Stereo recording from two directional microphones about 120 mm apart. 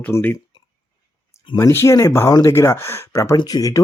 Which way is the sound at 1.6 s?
25° left (ahead or behind).